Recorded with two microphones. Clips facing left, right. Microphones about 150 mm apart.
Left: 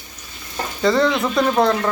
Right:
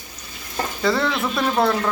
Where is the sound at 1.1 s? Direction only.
20° left (ahead or behind).